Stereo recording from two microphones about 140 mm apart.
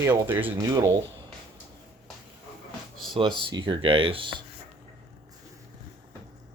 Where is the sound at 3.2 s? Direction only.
35° right (ahead or behind).